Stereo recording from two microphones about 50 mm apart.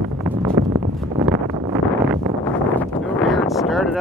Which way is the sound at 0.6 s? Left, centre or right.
Right.